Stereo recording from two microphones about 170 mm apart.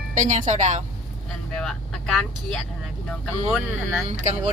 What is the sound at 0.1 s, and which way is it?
Speech, 45° right (ahead or behind).